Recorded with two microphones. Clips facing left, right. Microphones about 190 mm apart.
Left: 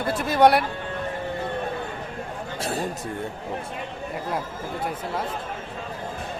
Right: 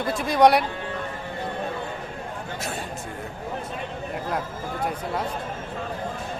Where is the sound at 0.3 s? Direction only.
5° left (ahead or behind).